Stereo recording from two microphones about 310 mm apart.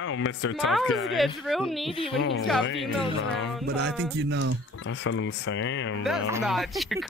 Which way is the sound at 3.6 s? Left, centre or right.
Right.